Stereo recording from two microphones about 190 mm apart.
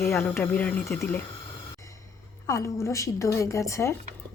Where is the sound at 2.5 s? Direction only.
15° left (ahead or behind).